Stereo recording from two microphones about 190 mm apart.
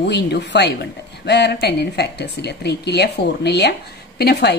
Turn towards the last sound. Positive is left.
turn(degrees=60)  # may be behind; listen again after turning